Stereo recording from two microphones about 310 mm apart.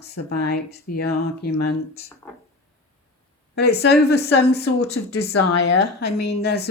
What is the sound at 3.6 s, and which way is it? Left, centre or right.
Speech, left.